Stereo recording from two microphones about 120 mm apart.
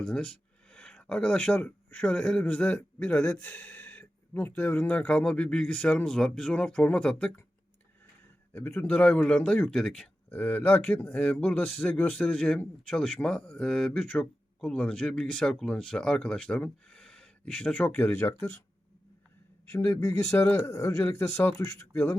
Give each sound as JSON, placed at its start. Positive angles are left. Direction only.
{"t": 0.0, "sound": "a man's voice", "side_deg": 10}
{"t": 8.5, "sound": "a man's voice", "side_deg": 15}
{"t": 19.7, "sound": "speech", "side_deg": 25}